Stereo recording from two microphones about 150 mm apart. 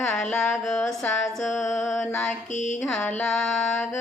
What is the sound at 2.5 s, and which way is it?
Mantra, 55° left (ahead or behind).